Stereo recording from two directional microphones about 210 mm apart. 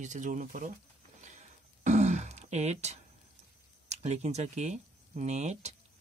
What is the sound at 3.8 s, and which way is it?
Speech, 30° right (ahead or behind).